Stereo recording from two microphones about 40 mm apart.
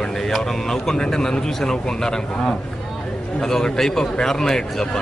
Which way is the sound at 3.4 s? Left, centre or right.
Centre.